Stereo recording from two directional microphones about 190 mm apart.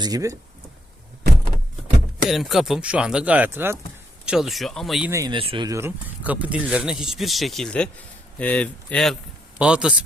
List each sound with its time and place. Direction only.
0.0 s speech: 20° right (ahead or behind)
2.3 s speech: centre (ahead or behind)
5.1 s speech: 20° right (ahead or behind)